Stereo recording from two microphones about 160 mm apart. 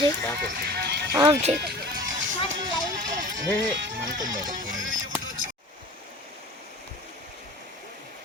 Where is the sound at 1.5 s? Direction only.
85° right.